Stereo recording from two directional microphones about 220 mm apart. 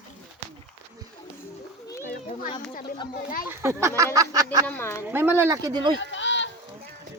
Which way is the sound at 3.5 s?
10° right (ahead or behind).